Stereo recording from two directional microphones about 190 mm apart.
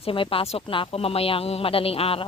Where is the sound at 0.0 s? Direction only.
30° left (ahead or behind).